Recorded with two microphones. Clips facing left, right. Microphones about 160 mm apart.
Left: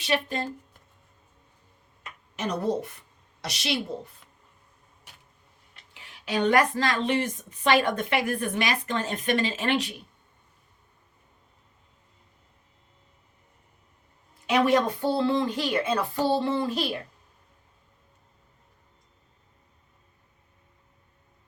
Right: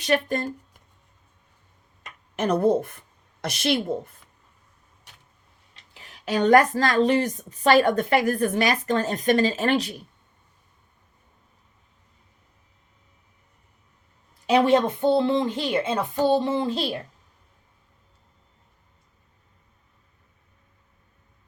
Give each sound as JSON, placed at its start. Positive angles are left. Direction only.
{"t": 0.0, "sound": "a woman's voice", "side_deg": -50}
{"t": 2.3, "sound": "a woman's voice", "side_deg": -55}
{"t": 5.9, "sound": "a woman's voice", "side_deg": -40}
{"t": 14.4, "sound": "a woman's voice", "side_deg": -30}